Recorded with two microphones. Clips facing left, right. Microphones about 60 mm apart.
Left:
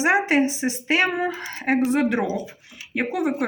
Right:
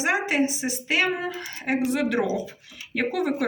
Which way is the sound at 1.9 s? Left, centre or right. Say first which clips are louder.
Left 2 dB; left.